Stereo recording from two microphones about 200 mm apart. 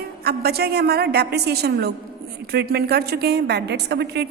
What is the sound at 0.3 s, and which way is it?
A woman's voice, 50° right (ahead or behind).